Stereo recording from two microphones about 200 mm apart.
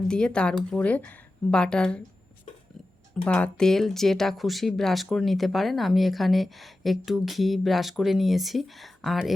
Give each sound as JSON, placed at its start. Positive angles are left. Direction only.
{"t": 0.1, "sound": "speech", "side_deg": 5}
{"t": 3.2, "sound": "speech", "side_deg": 5}